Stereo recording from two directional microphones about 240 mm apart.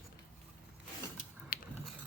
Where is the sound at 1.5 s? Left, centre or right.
Left.